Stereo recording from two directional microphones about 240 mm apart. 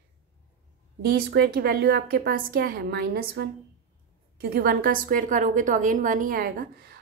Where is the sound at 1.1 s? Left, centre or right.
Right.